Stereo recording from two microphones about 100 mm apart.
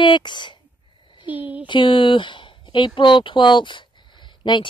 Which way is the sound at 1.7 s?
55° left (ahead or behind).